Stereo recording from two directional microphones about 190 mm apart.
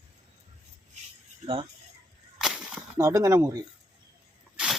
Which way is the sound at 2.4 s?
5° right (ahead or behind).